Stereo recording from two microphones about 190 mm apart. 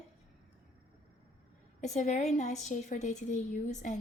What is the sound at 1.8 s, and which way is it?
A woman's voice, 40° left (ahead or behind).